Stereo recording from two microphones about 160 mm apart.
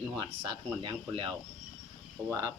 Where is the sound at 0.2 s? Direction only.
30° right (ahead or behind).